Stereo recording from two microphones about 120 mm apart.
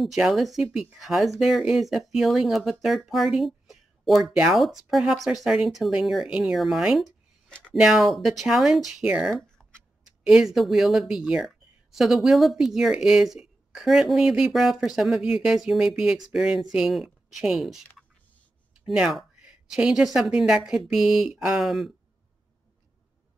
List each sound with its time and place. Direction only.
0.0 s speech: centre (ahead or behind)
7.4 s a sound: 5° left (ahead or behind)
7.8 s speech: centre (ahead or behind)
18.9 s speech: 5° right (ahead or behind)